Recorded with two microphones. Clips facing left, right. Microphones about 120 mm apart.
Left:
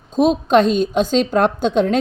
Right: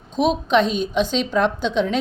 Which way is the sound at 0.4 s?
45° left (ahead or behind).